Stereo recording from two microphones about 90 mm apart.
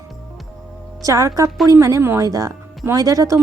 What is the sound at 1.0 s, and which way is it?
Speech, 40° right (ahead or behind).